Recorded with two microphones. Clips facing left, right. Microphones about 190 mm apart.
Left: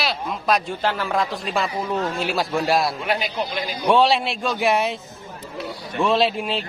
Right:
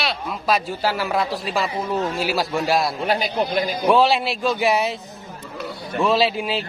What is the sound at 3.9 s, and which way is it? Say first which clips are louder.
A man's voice: even; centre (ahead or behind).